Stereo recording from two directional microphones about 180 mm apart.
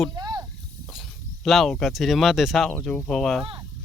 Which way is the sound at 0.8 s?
Centre (ahead or behind).